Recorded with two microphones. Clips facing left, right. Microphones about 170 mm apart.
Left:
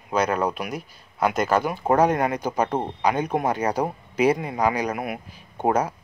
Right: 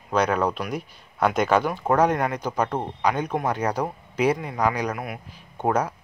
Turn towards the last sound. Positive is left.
turn(degrees=10)  # may be behind; listen again after turning